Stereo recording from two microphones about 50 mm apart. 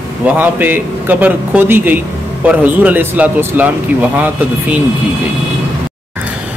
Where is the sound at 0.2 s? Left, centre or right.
Right.